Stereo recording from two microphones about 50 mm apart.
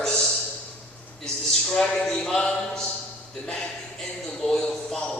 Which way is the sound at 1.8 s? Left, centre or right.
Centre.